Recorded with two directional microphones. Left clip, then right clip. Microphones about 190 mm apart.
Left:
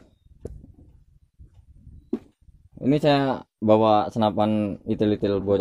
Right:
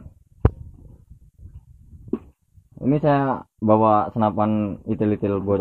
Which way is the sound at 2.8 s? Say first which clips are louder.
Right 1 dB; 35° left (ahead or behind).